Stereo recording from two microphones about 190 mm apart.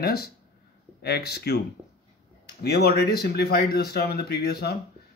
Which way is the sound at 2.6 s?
55° left (ahead or behind).